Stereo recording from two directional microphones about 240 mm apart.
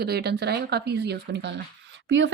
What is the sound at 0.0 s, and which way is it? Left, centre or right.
Speech, right.